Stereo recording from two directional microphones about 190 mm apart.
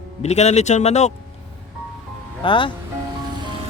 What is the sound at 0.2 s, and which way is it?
Speech, 35° left (ahead or behind).